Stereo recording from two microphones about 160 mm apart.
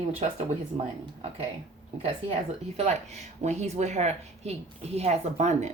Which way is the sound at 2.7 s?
45° right (ahead or behind).